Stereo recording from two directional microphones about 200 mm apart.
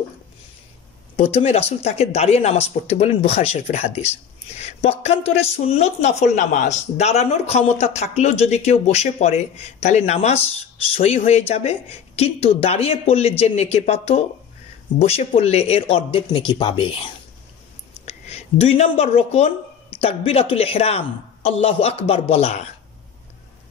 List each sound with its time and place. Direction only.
1.1 s speech: 30° left (ahead or behind)